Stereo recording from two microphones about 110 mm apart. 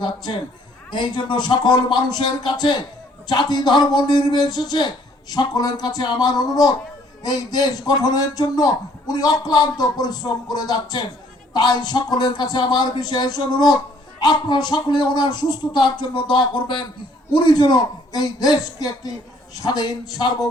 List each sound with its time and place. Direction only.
0.9 s a man's voice: 45° left (ahead or behind)